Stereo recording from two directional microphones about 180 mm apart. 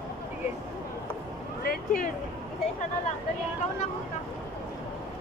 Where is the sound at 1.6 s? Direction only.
60° left (ahead or behind).